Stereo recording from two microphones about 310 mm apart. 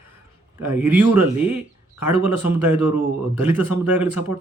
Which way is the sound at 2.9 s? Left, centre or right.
Centre.